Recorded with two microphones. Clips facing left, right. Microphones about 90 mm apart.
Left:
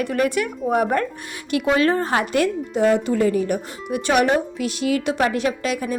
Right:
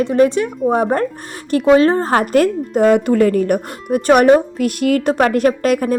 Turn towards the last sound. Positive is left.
turn(degrees=-50)  # may be behind; listen again after turning